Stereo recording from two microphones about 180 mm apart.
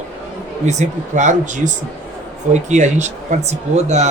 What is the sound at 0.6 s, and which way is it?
Speech, 40° right (ahead or behind).